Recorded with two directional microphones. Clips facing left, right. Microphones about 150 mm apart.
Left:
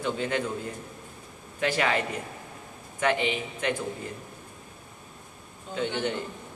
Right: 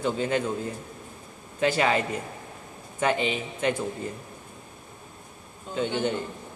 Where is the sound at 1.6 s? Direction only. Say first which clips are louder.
Right 3 dB; 30° right (ahead or behind).